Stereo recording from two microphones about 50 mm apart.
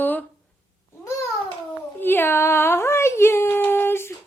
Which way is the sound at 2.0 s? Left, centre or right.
Left.